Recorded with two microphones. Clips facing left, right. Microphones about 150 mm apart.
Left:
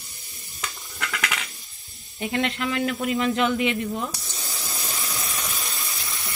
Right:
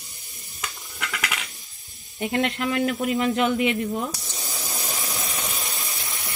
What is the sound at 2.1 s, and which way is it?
Speech, 45° right (ahead or behind).